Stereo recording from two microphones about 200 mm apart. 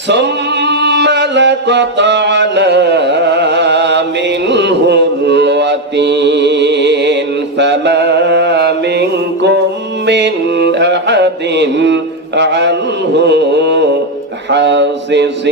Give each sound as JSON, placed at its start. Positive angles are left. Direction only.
{"t": 0.1, "sound": "music", "side_deg": -60}
{"t": 7.6, "sound": "mantra", "side_deg": -60}
{"t": 10.1, "sound": "music", "side_deg": -60}
{"t": 13.1, "sound": "carnatic music", "side_deg": -60}
{"t": 14.5, "sound": "a sound", "side_deg": -60}